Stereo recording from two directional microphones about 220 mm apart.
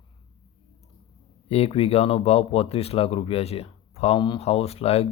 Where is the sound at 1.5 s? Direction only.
25° left (ahead or behind).